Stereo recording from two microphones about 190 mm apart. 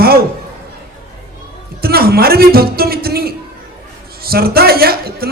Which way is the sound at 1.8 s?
55° right (ahead or behind).